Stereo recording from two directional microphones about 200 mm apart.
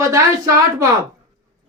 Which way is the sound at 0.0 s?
15° right (ahead or behind).